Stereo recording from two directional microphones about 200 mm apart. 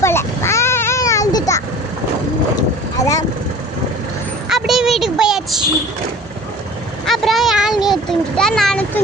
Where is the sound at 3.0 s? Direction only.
15° left (ahead or behind).